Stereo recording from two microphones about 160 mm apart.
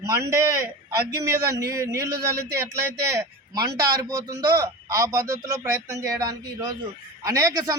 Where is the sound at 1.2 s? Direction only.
20° right (ahead or behind).